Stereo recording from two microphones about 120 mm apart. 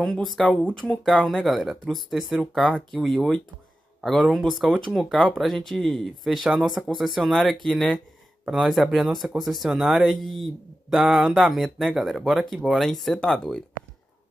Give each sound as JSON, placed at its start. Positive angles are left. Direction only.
{"t": 0.0, "sound": "speech", "side_deg": 5}